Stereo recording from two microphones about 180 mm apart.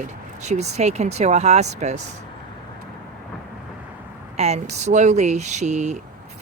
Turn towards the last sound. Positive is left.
turn(degrees=-40)  # may be behind; listen again after turning